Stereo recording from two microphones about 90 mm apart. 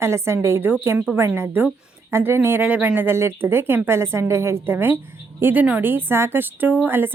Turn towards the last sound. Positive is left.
turn(degrees=-25)  # may be behind; listen again after turning